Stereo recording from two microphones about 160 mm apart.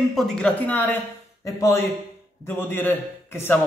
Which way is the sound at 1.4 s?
15° left (ahead or behind).